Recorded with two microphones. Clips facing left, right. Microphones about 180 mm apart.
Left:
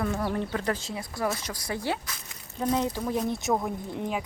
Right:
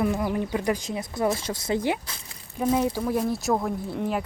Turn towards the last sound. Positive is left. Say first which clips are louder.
# right 4 dB
turn(degrees=-5)  # may be behind; listen again after turning